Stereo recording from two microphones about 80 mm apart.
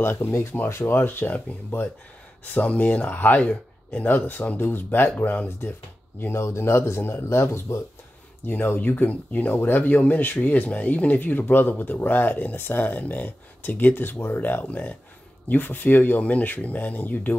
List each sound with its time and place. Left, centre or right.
0.0 s speech: left
6.2 s speech: left